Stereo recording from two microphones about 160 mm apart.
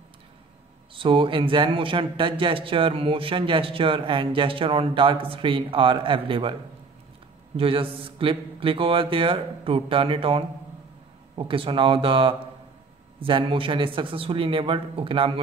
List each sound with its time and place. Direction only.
0.9 s speech: 35° right (ahead or behind)
7.5 s speech: 35° right (ahead or behind)